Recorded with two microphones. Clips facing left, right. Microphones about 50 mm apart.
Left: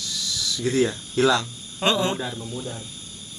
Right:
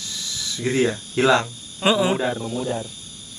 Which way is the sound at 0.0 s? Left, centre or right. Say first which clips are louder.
Left 2 dB; right.